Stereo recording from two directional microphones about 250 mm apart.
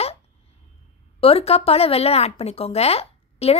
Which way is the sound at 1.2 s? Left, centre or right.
Left.